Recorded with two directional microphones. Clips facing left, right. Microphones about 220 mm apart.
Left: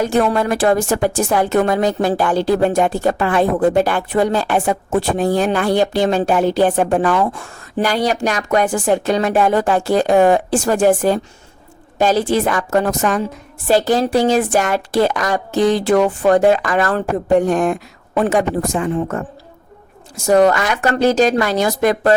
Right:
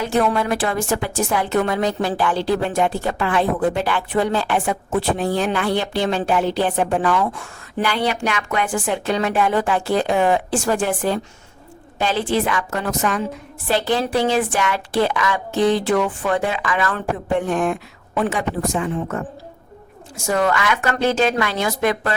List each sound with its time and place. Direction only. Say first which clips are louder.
0.0 s a woman's voice: left 3 dB; 45° left (ahead or behind)
20.2 s a woman's voice: left 7 dB; 40° left (ahead or behind)